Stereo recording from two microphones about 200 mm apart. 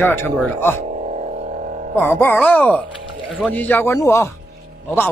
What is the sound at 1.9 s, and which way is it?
Speech, 10° left (ahead or behind).